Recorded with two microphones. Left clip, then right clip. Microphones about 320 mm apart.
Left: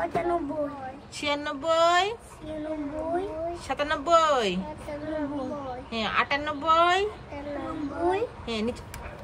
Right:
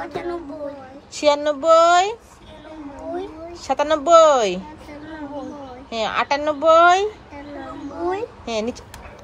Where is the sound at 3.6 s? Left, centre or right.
Centre.